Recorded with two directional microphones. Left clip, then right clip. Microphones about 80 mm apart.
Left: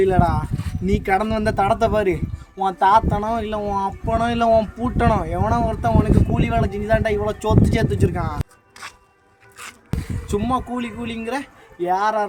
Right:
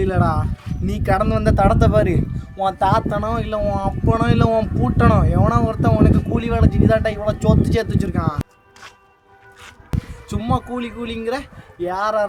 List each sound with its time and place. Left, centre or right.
0.0 s speech: right
9.9 s a sound: centre
10.2 s speech: right